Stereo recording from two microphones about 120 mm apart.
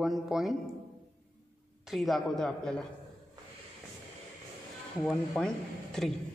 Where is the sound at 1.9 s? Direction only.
Centre (ahead or behind).